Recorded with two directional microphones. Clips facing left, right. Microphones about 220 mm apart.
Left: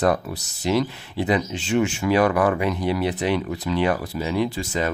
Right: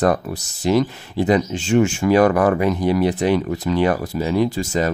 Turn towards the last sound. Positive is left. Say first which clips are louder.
# right 4 dB
turn(degrees=-45)  # may be behind; listen again after turning